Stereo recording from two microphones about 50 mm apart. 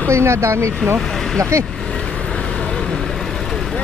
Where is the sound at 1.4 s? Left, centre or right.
Right.